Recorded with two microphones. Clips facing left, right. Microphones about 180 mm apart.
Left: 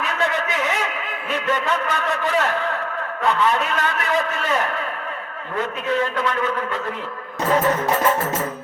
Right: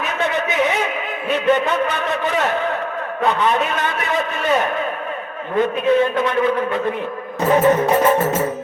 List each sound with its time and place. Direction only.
0.0 s a sound: 20° right (ahead or behind)
1.3 s a man's voice: 20° right (ahead or behind)
7.5 s a man's voice: 20° right (ahead or behind)